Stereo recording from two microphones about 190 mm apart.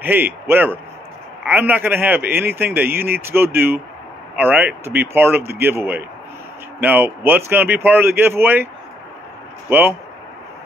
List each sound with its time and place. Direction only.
0.0 s a man's voice: 10° right (ahead or behind)
9.7 s speech: 10° right (ahead or behind)